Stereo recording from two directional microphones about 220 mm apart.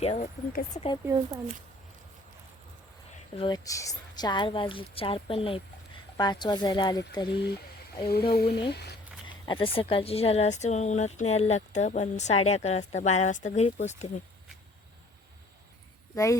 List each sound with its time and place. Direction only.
0.0 s a woman's voice: 30° left (ahead or behind)
1.0 s speech: 10° right (ahead or behind)
3.3 s a woman's voice: 20° left (ahead or behind)
8.0 s speech: 45° left (ahead or behind)
9.5 s speech: 25° left (ahead or behind)
16.1 s speech: 15° left (ahead or behind)